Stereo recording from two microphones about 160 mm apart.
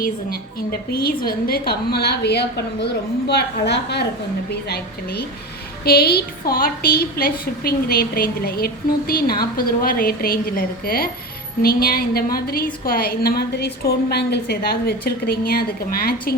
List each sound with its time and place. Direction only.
0.0 s a woman's voice: 65° left (ahead or behind)